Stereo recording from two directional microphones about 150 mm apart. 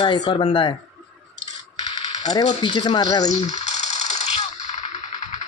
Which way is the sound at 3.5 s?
50° left (ahead or behind).